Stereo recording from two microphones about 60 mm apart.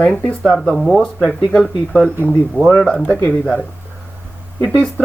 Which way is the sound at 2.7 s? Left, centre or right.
Centre.